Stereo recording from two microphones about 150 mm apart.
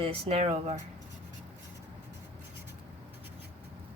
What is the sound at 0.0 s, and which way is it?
Speech, 40° right (ahead or behind).